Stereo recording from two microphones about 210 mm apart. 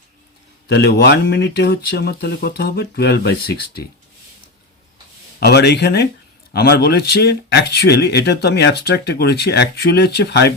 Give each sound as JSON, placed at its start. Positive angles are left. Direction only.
{"t": 0.7, "sound": "speech", "side_deg": 50}
{"t": 5.4, "sound": "speech", "side_deg": 50}